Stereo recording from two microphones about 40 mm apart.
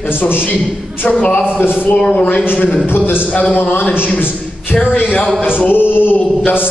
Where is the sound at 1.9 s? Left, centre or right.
Left.